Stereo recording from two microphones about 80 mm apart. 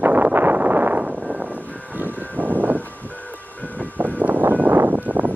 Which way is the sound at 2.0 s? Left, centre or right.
Right.